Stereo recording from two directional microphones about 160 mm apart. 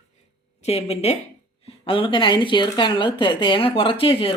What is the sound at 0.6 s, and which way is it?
A woman's voice, 40° left (ahead or behind).